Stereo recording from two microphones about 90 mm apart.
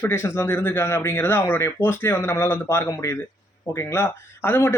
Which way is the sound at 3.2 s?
20° left (ahead or behind).